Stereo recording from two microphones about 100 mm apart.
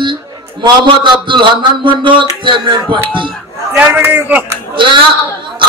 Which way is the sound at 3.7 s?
20° right (ahead or behind).